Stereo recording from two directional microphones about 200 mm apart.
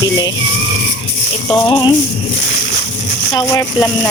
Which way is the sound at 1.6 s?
20° left (ahead or behind).